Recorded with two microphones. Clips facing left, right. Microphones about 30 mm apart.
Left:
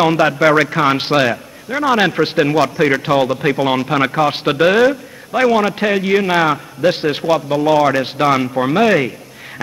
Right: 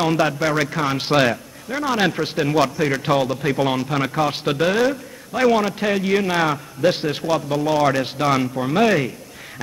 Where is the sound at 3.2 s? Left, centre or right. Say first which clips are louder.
Left 5 dB; left.